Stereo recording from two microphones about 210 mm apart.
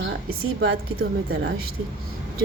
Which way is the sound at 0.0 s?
65° right (ahead or behind).